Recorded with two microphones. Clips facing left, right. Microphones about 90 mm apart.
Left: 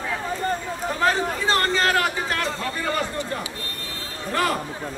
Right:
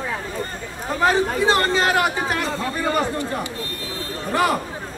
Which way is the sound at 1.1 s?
15° right (ahead or behind).